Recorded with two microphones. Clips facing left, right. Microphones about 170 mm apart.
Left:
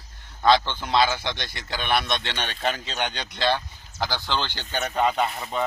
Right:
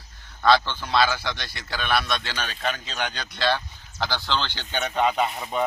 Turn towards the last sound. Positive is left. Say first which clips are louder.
# right 1 dB
turn(degrees=-5)  # may be behind; listen again after turning